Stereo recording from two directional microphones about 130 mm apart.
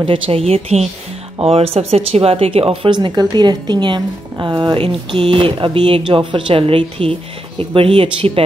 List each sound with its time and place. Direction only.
0.0 s speech: 45° right (ahead or behind)